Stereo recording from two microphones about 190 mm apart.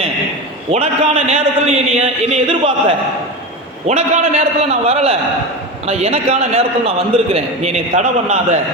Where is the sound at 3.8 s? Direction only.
35° right (ahead or behind).